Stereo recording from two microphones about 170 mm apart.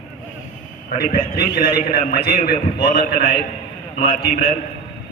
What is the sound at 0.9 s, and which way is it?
A man's voice, 60° left (ahead or behind).